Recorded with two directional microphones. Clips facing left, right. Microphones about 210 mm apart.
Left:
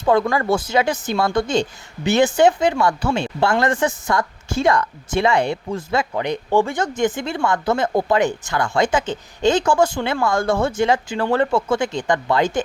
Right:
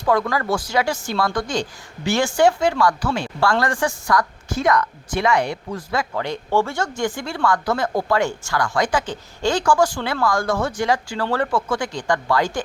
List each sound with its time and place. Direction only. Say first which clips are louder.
0.0 s speech: left 3 dB; 25° left (ahead or behind)